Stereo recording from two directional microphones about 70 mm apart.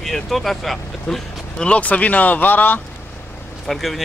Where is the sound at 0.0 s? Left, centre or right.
Centre; by 2.8 s left.